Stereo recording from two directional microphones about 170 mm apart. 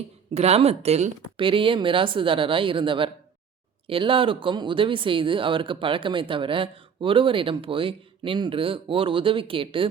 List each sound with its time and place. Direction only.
0.3 s speech: 40° right (ahead or behind)